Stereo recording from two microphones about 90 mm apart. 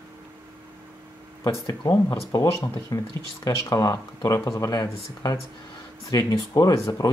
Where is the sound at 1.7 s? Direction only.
40° left (ahead or behind).